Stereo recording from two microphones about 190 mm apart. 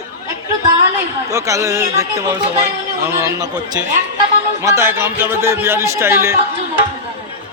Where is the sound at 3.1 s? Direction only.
15° right (ahead or behind).